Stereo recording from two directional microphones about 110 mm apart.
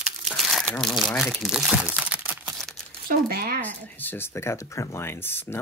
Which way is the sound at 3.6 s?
15° left (ahead or behind).